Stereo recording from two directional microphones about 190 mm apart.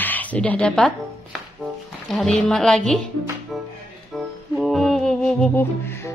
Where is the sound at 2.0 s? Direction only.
Centre (ahead or behind).